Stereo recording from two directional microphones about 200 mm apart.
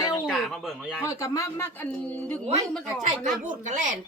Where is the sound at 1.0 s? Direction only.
15° left (ahead or behind).